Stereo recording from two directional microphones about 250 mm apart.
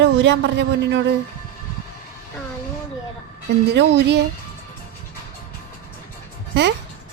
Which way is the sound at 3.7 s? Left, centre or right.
Right.